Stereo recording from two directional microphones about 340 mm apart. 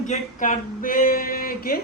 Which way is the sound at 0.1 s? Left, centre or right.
Left.